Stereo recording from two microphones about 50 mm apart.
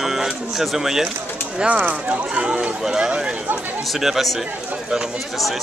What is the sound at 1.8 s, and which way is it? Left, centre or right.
Speech, right.